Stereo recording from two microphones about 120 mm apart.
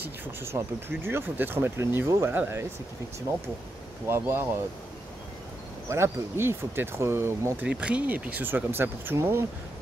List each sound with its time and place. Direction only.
0.0 s speech: 20° right (ahead or behind)
4.1 s speech: 20° right (ahead or behind)
5.9 s speech: 20° right (ahead or behind)
7.6 s speech: 10° right (ahead or behind)